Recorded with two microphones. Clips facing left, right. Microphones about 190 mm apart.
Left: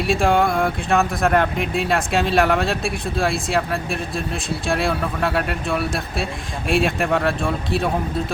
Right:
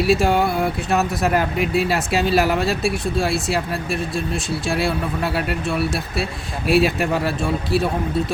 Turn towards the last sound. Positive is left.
turn(degrees=0)  # may be behind; listen again after turning